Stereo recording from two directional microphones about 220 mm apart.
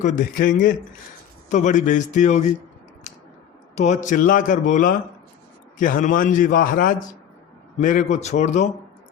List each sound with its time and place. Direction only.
0.0 s a man's voice: 35° left (ahead or behind)
3.8 s a man's voice: 35° left (ahead or behind)